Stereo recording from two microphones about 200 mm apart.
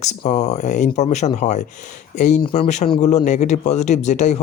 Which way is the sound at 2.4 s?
25° left (ahead or behind).